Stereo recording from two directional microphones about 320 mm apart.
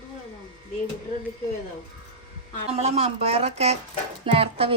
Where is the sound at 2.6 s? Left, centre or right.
Centre.